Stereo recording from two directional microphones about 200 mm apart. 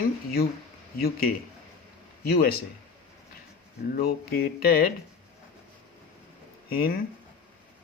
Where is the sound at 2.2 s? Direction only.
50° left (ahead or behind).